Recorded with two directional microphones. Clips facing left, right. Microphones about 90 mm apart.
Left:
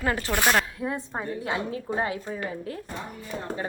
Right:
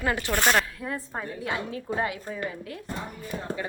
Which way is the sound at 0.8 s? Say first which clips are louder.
Left 3 dB; 20° left (ahead or behind).